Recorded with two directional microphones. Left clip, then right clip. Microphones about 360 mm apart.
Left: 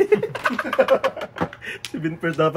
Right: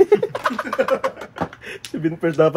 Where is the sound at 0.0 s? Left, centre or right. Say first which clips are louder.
Right 3 dB; right.